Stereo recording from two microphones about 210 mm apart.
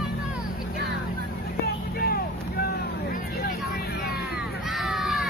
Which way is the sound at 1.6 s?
45° left (ahead or behind).